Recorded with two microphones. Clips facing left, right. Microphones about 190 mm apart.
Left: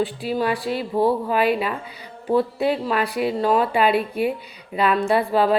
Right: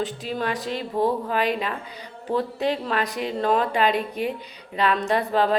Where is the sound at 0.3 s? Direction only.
10° left (ahead or behind).